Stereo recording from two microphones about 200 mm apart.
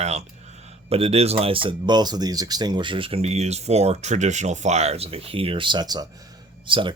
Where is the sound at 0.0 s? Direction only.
35° right (ahead or behind).